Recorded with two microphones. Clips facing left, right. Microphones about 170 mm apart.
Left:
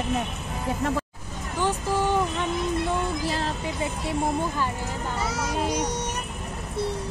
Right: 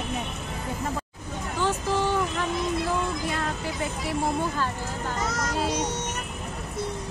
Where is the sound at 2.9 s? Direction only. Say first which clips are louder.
Left 1 dB; 30° left (ahead or behind).